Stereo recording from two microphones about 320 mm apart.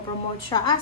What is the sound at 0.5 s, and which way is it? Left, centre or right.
Speech, centre.